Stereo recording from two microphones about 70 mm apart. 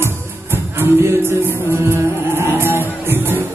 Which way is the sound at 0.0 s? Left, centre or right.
Right.